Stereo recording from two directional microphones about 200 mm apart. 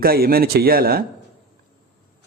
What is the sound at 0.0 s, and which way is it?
A man's voice, 50° right (ahead or behind).